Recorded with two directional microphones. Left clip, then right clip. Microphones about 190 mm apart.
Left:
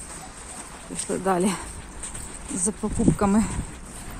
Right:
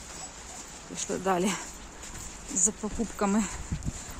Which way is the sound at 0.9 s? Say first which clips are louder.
Left 4 dB; centre (ahead or behind).